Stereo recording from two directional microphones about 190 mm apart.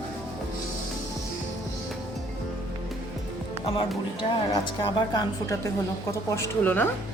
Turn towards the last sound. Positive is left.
turn(degrees=10)  # may be behind; listen again after turning